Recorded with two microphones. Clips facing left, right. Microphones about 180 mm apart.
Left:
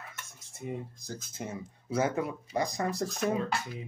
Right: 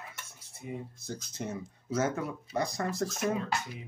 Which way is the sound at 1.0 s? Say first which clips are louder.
Right 1 dB; 5° left (ahead or behind).